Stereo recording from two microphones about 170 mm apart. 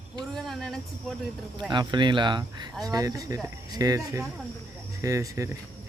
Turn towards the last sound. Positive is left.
turn(degrees=-15)  # may be behind; listen again after turning